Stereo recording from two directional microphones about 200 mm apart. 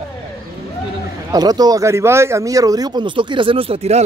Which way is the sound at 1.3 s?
20° right (ahead or behind).